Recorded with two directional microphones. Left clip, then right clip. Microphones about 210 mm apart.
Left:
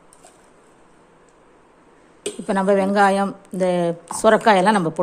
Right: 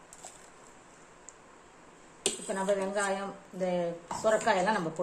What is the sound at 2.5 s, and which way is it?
A woman's voice, 50° left (ahead or behind).